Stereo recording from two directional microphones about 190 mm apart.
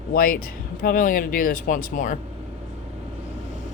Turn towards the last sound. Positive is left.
turn(degrees=45)  # may be behind; listen again after turning